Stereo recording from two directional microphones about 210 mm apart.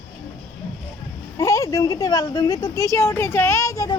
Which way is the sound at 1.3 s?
15° left (ahead or behind).